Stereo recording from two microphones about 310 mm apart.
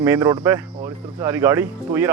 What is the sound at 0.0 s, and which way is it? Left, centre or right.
Speech, centre.